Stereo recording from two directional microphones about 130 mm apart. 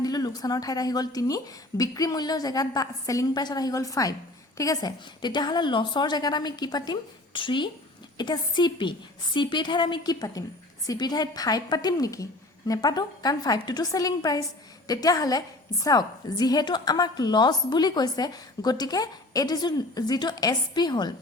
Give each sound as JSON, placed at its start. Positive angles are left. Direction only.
{"t": 0.0, "sound": "a woman's voice", "side_deg": 30}